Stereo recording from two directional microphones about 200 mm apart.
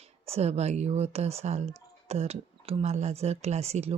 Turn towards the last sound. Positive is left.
turn(degrees=-30)  # may be behind; listen again after turning